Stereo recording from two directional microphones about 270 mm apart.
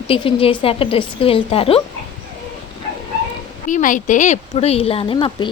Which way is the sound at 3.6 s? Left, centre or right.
Left.